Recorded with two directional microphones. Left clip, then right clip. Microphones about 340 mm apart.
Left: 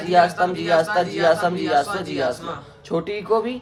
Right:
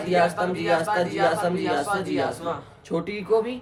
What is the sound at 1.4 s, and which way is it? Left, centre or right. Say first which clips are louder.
Speech: left 3 dB; centre.